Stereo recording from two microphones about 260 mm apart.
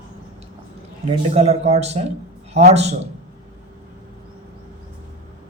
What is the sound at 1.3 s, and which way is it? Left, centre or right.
Speech, right.